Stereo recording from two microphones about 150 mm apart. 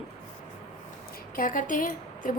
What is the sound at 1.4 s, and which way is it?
Speech, 65° left (ahead or behind).